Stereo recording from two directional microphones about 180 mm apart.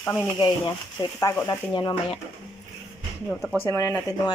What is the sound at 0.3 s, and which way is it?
Speech, 20° left (ahead or behind).